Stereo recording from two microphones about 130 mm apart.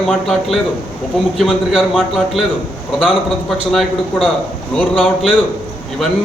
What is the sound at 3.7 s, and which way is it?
A man's voice, centre (ahead or behind).